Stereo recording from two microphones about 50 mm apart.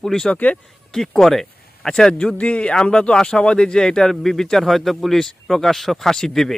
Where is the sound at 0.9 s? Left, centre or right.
Centre.